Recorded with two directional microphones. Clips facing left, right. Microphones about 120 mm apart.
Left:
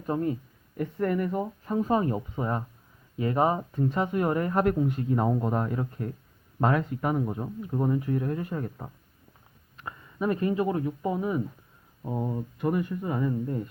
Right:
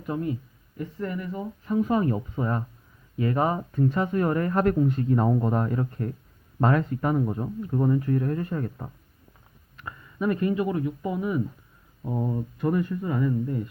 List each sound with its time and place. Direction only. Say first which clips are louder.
0.0 s speech: left 1 dB; 40° left (ahead or behind)
0.8 s speech: left 5 dB; 55° left (ahead or behind)
1.7 s speech: right 2 dB; 30° left (ahead or behind); by 8.9 s 10° left (ahead or behind)
9.7 s speech: right 2 dB; 25° left (ahead or behind)
12.0 s speech: right 2 dB; 10° left (ahead or behind)